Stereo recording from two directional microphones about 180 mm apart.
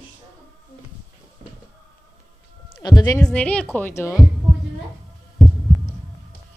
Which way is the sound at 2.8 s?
20° left (ahead or behind).